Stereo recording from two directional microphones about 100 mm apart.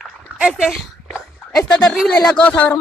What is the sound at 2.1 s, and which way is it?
Speech, 10° left (ahead or behind).